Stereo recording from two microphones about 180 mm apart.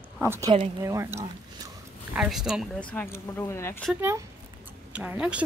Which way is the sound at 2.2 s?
5° right (ahead or behind).